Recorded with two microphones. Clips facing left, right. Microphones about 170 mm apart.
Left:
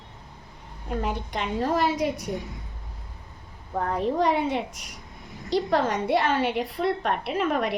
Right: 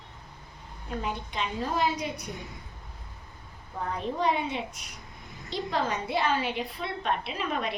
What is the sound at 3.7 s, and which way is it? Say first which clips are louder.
A woman's voice: left 7 dB; 60° left (ahead or behind).